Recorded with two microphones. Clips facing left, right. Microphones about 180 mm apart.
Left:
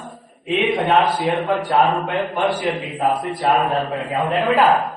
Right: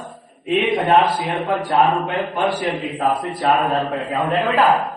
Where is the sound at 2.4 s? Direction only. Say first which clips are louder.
Even; 35° right (ahead or behind).